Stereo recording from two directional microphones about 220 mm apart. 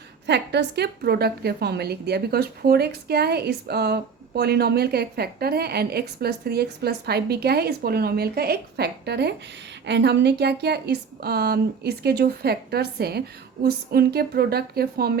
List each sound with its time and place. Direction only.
0.3 s a woman's voice: 50° right (ahead or behind)